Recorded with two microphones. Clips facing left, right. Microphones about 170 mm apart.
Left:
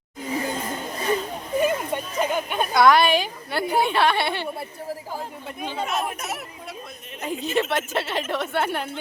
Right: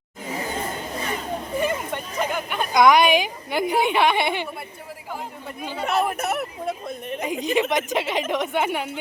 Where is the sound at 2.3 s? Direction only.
20° left (ahead or behind).